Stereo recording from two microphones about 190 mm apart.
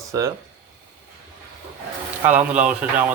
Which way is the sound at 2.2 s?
10° right (ahead or behind).